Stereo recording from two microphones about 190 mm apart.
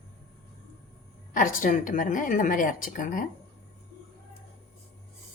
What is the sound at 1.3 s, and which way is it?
A woman's voice, 45° left (ahead or behind).